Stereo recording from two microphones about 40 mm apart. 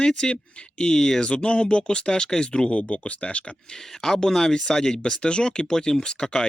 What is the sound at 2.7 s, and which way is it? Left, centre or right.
Speech, left.